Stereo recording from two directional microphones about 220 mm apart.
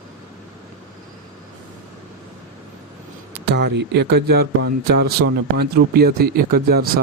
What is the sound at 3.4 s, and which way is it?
Speech, 50° right (ahead or behind).